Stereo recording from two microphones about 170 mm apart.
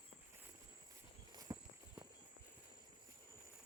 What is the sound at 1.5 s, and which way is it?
Walk, 25° right (ahead or behind).